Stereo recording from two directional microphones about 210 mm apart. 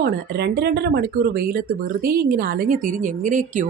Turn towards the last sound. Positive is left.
turn(degrees=-35)  # may be behind; listen again after turning